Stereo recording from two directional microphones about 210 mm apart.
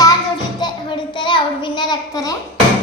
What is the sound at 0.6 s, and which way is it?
A child's voice, 20° left (ahead or behind).